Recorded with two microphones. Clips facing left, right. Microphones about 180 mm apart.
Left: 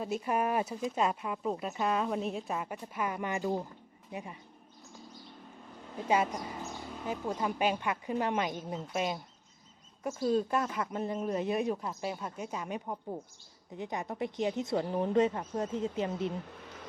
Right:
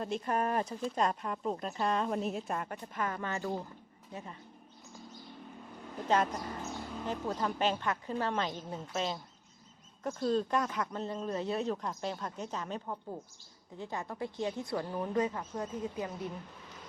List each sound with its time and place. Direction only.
0.0 s speech: 5° left (ahead or behind)
6.1 s a woman's voice: 10° left (ahead or behind)